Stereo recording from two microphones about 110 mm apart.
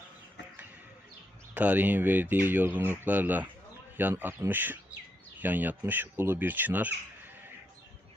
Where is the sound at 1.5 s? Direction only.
15° right (ahead or behind).